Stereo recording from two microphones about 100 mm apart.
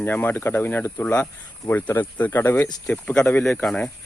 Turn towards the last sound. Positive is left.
turn(degrees=10)  # may be behind; listen again after turning